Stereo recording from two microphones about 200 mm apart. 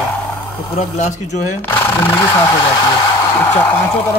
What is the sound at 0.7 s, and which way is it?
Speech, 35° left (ahead or behind).